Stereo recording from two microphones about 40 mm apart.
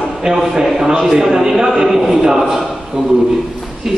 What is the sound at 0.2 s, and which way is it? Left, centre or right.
A man's voice, centre.